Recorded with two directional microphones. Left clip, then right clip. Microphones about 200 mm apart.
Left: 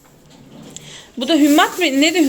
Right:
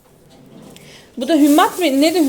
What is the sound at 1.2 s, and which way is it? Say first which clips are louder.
Speech: right 1 dB; 10° right (ahead or behind).